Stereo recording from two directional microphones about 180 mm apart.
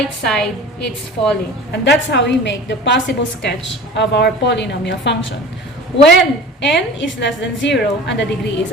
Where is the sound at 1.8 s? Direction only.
75° left (ahead or behind).